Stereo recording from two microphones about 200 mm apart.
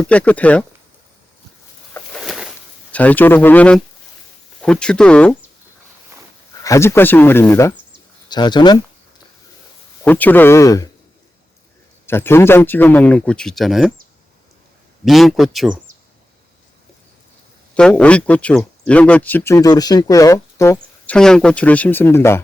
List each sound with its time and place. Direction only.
0.0 s speech: 5° left (ahead or behind)
1.9 s a sound: 5° left (ahead or behind)
2.9 s speech: 10° left (ahead or behind)
6.6 s speech: 15° left (ahead or behind)
8.3 s speech: 20° left (ahead or behind)
10.0 s speech: 10° left (ahead or behind)
12.0 s speech: 10° left (ahead or behind)
15.0 s speech: centre (ahead or behind)
17.7 s speech: 5° left (ahead or behind)